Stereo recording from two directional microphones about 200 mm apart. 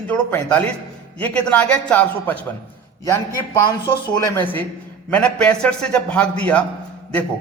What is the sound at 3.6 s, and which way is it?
Speech, 20° left (ahead or behind).